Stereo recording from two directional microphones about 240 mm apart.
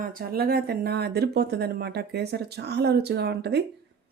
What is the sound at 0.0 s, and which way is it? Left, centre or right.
Speech, right.